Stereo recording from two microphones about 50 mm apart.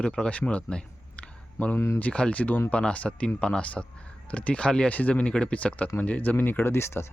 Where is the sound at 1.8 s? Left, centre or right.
Left.